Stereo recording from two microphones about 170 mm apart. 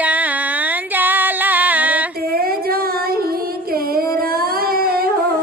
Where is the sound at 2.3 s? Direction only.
65° right (ahead or behind).